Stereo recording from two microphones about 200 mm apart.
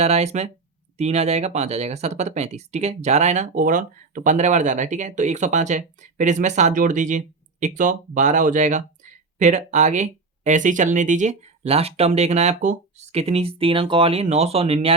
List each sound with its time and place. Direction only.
0.0 s speech: 30° right (ahead or behind)